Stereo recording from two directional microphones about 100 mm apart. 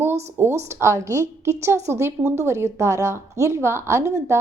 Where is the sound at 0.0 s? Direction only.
25° right (ahead or behind).